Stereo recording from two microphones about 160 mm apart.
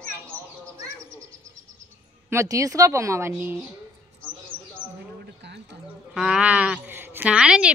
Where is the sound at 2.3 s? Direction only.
20° right (ahead or behind).